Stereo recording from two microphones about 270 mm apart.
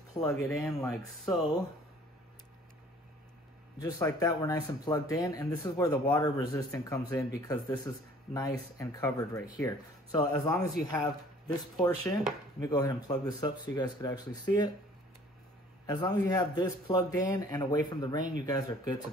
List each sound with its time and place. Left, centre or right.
0.3 s speech: centre
3.7 s speech: centre
12.0 s speech: centre
12.5 s speech: centre
15.9 s speech: centre